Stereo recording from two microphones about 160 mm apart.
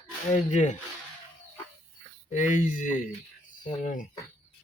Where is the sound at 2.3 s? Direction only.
50° left (ahead or behind).